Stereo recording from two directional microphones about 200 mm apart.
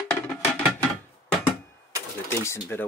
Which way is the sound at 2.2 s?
10° left (ahead or behind).